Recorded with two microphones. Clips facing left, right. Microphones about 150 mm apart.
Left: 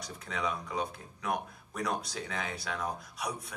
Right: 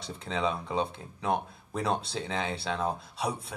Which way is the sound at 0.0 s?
25° right (ahead or behind).